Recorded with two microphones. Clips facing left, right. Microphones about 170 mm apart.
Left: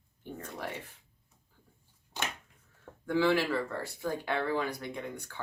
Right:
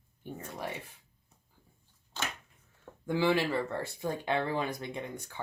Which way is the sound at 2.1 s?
15° left (ahead or behind).